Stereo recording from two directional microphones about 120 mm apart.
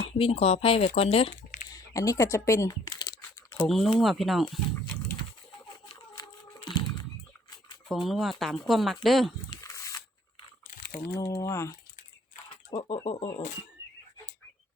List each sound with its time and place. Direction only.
0.0 s speech: 50° left (ahead or behind)
1.7 s crumpling: 25° left (ahead or behind)
3.9 s speech: centre (ahead or behind)
6.2 s a sound: 40° left (ahead or behind)
7.9 s speech: centre (ahead or behind)
9.6 s a sound: 25° left (ahead or behind)
11.2 s speech: 25° left (ahead or behind)
12.7 s speech: 50° left (ahead or behind)